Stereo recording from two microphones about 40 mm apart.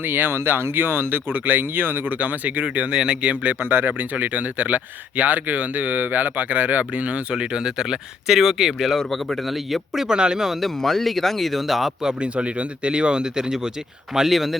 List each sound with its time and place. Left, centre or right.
0.0 s speech: right
2.1 s speech: right
2.9 s speech: centre
3.2 s speech: right
3.6 s speech: right
7.3 s speech: centre
9.0 s speech: centre
10.2 s speech: centre
10.6 s speech: centre
12.0 s speech: right
14.1 s speech: centre